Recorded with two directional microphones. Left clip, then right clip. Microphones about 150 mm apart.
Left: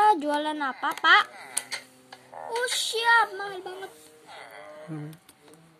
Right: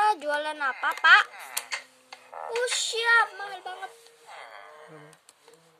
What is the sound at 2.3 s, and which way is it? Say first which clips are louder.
A woman's voice: even; 15° right (ahead or behind).